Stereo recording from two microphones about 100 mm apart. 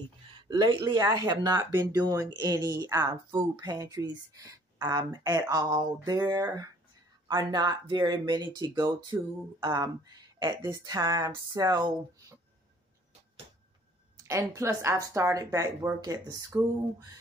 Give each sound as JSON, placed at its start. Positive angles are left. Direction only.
{"t": 0.8, "sound": "speech", "side_deg": -45}
{"t": 14.1, "sound": "speech", "side_deg": -35}